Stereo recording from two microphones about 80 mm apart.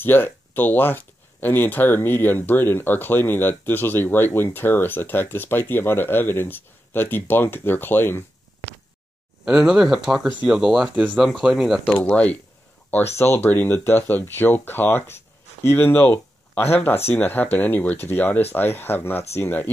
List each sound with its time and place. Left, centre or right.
0.0 s speech: left
9.4 s speech: centre
11.9 s speech: centre
12.9 s speech: left